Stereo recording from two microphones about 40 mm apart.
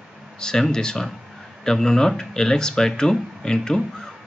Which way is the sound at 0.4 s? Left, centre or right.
Centre.